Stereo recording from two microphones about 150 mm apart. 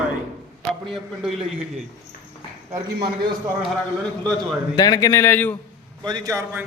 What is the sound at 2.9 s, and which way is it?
Speech, 90° right.